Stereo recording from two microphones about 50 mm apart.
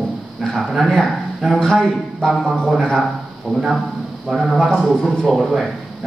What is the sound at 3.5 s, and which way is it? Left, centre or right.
Speech, centre.